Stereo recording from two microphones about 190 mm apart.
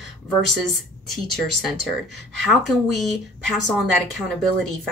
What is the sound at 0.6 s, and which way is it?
Speech, centre (ahead or behind).